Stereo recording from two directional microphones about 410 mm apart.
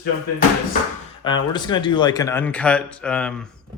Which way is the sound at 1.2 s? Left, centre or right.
Centre.